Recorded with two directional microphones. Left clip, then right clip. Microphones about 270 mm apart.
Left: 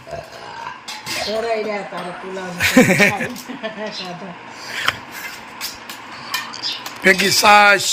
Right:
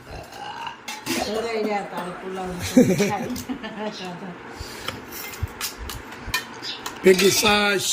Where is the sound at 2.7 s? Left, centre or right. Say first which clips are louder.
Left 5 dB; left.